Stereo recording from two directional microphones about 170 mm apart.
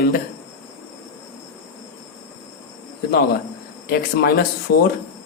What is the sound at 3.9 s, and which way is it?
Speech, 60° left (ahead or behind).